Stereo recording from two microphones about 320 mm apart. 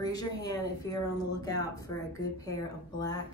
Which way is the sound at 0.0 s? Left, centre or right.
Centre.